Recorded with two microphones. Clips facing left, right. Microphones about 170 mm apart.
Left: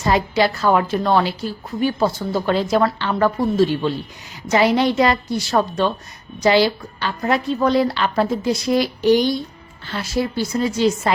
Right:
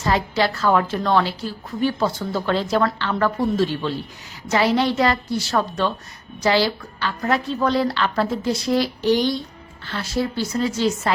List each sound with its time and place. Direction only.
0.0 s a woman's voice: 15° left (ahead or behind)